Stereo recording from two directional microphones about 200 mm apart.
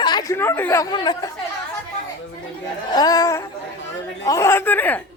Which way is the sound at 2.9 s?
20° left (ahead or behind).